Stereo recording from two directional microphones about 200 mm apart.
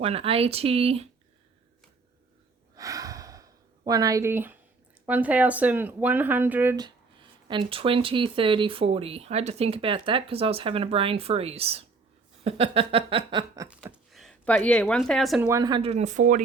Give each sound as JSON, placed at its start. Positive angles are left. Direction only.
{"t": 0.0, "sound": "speech", "side_deg": -30}
{"t": 2.7, "sound": "a sound", "side_deg": -15}
{"t": 5.0, "sound": "speech", "side_deg": -10}
{"t": 6.7, "sound": "speech", "side_deg": -20}
{"t": 13.7, "sound": "speech", "side_deg": 0}
{"t": 15.4, "sound": "speech", "side_deg": -20}